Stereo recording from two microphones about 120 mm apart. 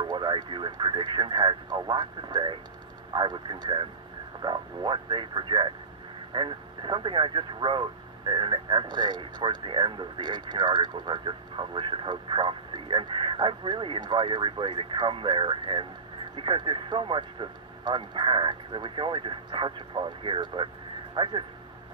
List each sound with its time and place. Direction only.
0.0 s speech: 40° right (ahead or behind)